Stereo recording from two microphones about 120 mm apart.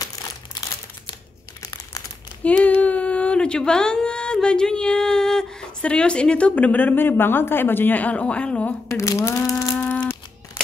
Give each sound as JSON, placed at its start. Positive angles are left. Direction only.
{"t": 1.6, "sound": "crumpling", "side_deg": 30}
{"t": 2.4, "sound": "speech", "side_deg": 10}
{"t": 8.8, "sound": "speech", "side_deg": 25}